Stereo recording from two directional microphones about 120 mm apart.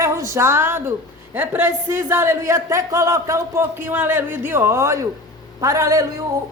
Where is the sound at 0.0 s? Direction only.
25° right (ahead or behind).